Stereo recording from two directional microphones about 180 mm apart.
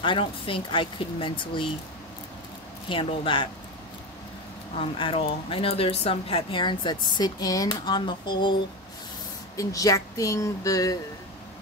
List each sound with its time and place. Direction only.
0.0 s a woman's voice: 30° left (ahead or behind)
2.9 s a woman's voice: 25° left (ahead or behind)
4.7 s a woman's voice: 30° left (ahead or behind)
9.6 s a woman's voice: 20° left (ahead or behind)